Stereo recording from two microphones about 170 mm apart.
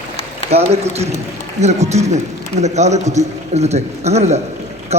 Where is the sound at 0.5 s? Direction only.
40° right (ahead or behind).